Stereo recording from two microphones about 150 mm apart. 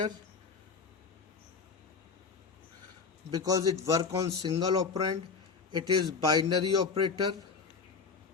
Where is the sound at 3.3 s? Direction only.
25° right (ahead or behind).